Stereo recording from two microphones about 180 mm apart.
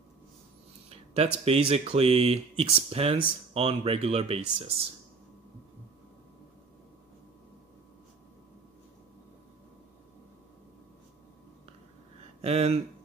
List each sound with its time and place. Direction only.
0.8 s speech: 35° right (ahead or behind)
12.4 s speech: 35° right (ahead or behind)